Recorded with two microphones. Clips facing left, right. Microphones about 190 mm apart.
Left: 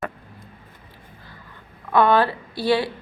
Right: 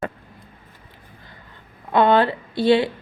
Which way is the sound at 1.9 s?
25° right (ahead or behind).